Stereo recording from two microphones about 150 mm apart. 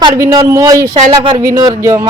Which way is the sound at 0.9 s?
35° right (ahead or behind).